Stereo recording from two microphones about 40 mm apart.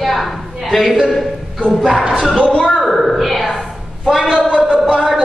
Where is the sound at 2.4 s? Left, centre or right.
Left.